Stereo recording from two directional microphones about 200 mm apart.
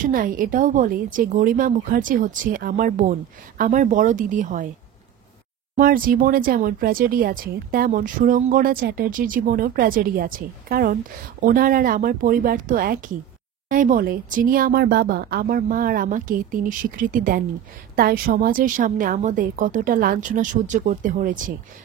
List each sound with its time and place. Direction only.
0.0 s a woman's voice: 45° right (ahead or behind)
5.8 s a woman's voice: 45° right (ahead or behind)